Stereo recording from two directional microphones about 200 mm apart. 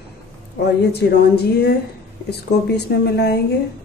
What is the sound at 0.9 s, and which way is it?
Speech, 55° left (ahead or behind).